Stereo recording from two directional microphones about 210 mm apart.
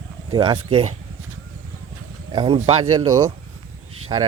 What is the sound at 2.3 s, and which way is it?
Speech, 25° right (ahead or behind).